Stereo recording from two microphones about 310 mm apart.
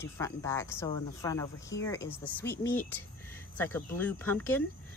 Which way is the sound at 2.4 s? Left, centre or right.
Left.